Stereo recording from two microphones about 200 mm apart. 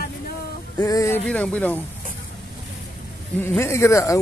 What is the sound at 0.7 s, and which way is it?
Speech, 15° left (ahead or behind).